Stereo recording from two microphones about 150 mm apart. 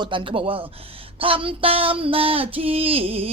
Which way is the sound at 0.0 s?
35° right (ahead or behind).